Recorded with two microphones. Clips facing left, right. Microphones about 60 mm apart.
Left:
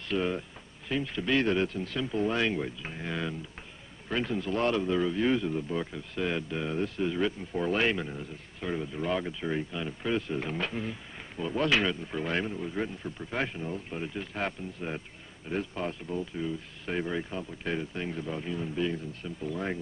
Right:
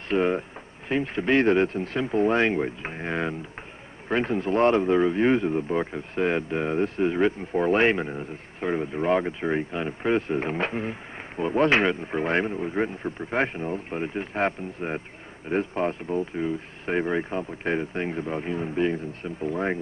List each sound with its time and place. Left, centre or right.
0.1 s a man's voice: right